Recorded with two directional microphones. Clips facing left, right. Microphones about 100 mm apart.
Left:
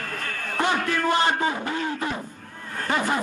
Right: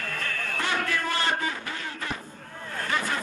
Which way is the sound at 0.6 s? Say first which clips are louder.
Left 6 dB; 20° left (ahead or behind).